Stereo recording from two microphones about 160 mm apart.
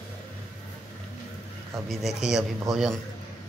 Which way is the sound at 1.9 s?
Centre (ahead or behind).